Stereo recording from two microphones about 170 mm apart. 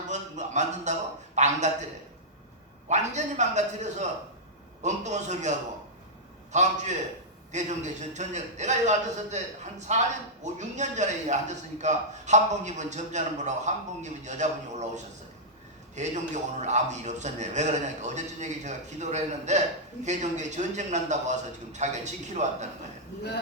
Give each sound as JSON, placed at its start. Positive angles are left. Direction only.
{"t": 0.1, "sound": "a man's voice", "side_deg": -45}
{"t": 2.9, "sound": "a man's voice", "side_deg": -45}